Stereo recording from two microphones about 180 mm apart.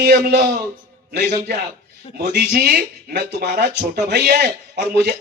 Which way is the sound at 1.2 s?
45° right (ahead or behind).